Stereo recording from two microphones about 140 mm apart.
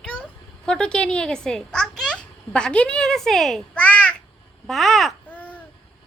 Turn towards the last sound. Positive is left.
turn(degrees=10)  # may be behind; listen again after turning